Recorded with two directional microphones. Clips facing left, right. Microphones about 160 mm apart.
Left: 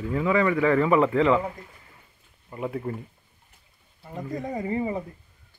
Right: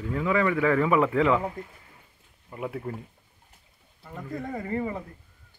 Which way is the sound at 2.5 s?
5° right (ahead or behind).